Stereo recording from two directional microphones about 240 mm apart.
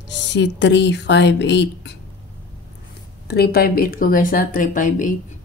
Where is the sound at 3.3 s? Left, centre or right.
Left.